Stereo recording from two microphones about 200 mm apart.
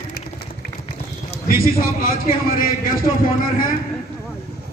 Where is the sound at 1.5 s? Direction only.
45° left (ahead or behind).